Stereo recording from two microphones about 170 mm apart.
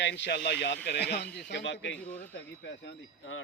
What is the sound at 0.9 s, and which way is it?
Speech, 75° left (ahead or behind).